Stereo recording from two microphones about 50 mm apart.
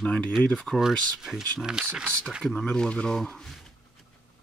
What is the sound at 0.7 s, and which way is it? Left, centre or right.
Speech, centre.